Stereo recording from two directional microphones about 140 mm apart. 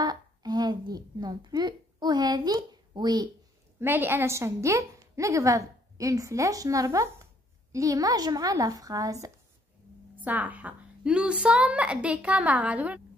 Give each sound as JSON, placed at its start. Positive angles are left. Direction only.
{"t": 0.0, "sound": "speech", "side_deg": -30}
{"t": 3.8, "sound": "a woman's voice", "side_deg": -15}
{"t": 10.1, "sound": "a woman's voice", "side_deg": -10}